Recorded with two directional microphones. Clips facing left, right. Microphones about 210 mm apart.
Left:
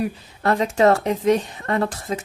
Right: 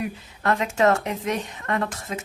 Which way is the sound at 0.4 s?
35° left (ahead or behind).